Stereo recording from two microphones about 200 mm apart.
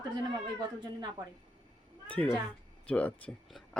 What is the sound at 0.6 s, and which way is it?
Speech, 20° right (ahead or behind).